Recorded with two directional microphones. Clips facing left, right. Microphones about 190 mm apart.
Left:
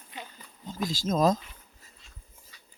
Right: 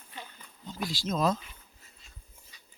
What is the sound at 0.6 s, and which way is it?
Speech, 45° left (ahead or behind).